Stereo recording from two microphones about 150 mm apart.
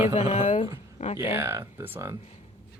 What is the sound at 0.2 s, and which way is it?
Speech, 55° left (ahead or behind).